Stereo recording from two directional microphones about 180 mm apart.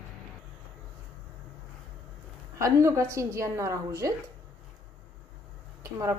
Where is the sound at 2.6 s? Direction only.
15° right (ahead or behind).